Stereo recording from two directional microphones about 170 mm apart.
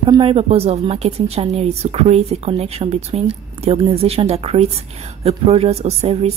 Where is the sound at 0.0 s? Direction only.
30° right (ahead or behind).